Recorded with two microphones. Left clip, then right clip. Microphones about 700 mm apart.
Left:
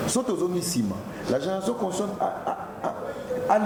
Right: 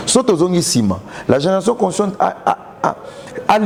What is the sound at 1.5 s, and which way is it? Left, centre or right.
Speech, right.